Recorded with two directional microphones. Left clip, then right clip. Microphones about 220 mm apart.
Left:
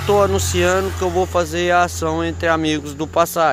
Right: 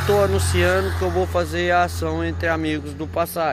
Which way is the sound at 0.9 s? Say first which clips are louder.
Left 3 dB; 45° left (ahead or behind).